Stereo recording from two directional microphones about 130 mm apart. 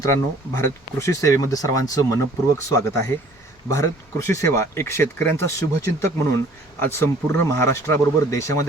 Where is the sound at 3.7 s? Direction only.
25° left (ahead or behind).